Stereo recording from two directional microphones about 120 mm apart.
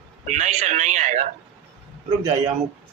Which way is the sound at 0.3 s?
75° right (ahead or behind).